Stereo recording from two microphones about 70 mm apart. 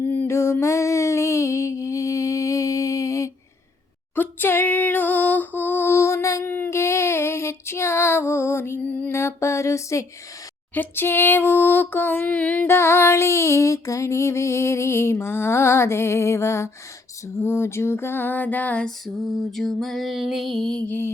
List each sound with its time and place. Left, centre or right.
0.0 s music: left
0.3 s music: left
4.1 s female singing: left
6.5 s child singing: left
9.1 s music: left
10.8 s female singing: left
12.6 s music: left
18.9 s music: centre
20.8 s female singing: left